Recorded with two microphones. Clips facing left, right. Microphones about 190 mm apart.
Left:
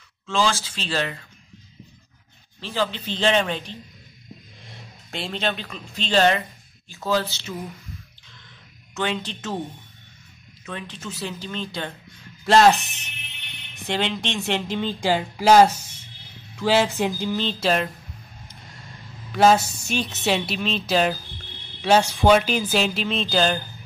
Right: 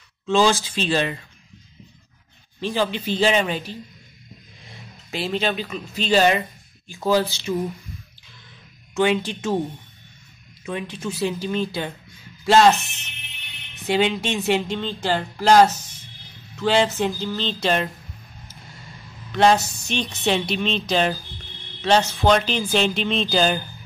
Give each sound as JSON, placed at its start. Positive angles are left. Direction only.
{"t": 0.3, "sound": "speech", "side_deg": -15}
{"t": 2.6, "sound": "speech", "side_deg": -15}
{"t": 5.1, "sound": "speech", "side_deg": -5}
{"t": 8.9, "sound": "speech", "side_deg": -10}
{"t": 10.6, "sound": "a woman's voice", "side_deg": -15}
{"t": 13.8, "sound": "a woman's voice", "side_deg": -5}
{"t": 14.8, "sound": "music", "side_deg": 10}
{"t": 19.3, "sound": "a woman's voice", "side_deg": 5}